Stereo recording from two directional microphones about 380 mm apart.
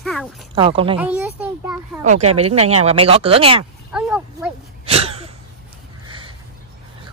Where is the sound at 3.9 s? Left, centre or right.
Centre.